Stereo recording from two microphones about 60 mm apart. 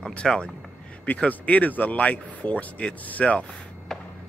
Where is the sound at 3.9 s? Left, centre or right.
Centre.